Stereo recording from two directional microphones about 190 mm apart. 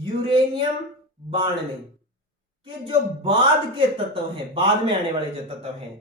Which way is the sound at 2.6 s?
25° right (ahead or behind).